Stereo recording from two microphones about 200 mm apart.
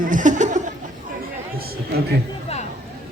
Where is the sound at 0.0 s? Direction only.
40° right (ahead or behind).